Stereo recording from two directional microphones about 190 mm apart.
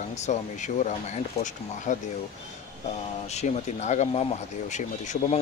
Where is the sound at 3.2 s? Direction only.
35° left (ahead or behind).